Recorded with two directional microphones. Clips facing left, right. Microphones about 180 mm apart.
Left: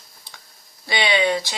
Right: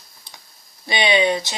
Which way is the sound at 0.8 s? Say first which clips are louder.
Right 2 dB; 20° right (ahead or behind).